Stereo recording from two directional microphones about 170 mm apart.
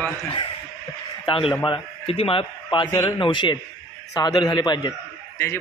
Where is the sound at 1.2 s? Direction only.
30° left (ahead or behind).